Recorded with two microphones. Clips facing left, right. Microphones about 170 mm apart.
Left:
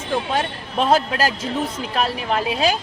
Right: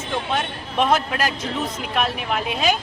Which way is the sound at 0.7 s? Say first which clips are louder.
Left 2 dB; 30° left (ahead or behind).